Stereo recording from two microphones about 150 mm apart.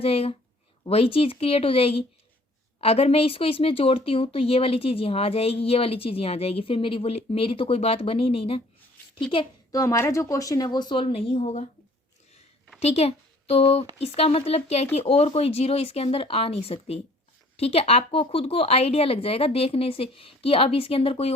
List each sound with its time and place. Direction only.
0.0 s speech: 40° left (ahead or behind)
9.7 s speech: 20° left (ahead or behind); by 11.7 s 50° left (ahead or behind)
12.8 s speech: 45° left (ahead or behind)